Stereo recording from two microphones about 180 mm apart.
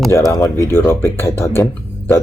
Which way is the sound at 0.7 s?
15° left (ahead or behind).